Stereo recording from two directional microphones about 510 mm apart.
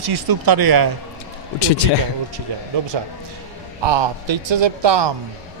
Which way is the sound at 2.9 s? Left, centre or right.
Right.